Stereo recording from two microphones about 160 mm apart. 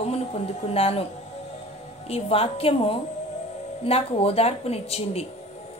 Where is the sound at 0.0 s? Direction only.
40° left (ahead or behind).